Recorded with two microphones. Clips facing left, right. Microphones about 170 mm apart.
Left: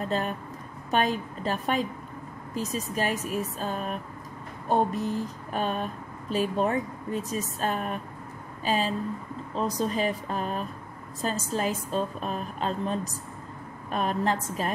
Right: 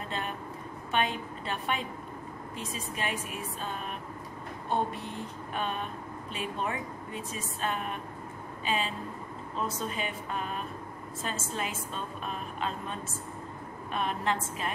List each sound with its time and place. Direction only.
0.1 s a woman's voice: 40° left (ahead or behind)